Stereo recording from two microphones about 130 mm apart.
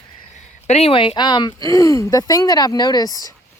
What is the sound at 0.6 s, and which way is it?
Speech, 50° left (ahead or behind).